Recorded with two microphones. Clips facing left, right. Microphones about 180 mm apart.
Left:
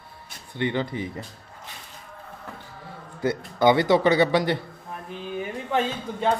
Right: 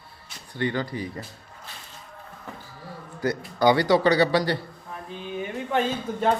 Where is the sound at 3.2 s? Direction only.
25° left (ahead or behind).